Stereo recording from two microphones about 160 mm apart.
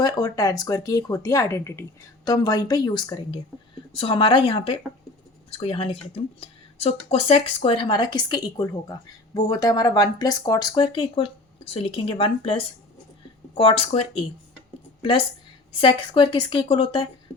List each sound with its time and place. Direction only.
0.0 s a woman's voice: 25° left (ahead or behind)
15.8 s a woman's voice: 30° left (ahead or behind)